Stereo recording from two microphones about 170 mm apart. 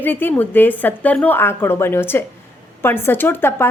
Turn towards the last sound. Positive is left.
turn(degrees=15)  # may be behind; listen again after turning